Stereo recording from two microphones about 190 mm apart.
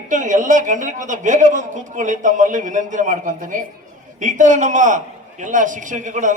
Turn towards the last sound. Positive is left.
turn(degrees=-40)  # may be behind; listen again after turning